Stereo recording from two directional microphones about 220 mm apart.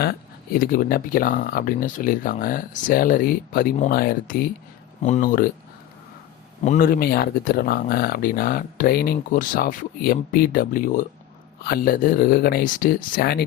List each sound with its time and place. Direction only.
0.0 s speech: 45° left (ahead or behind)
6.6 s speech: 35° left (ahead or behind)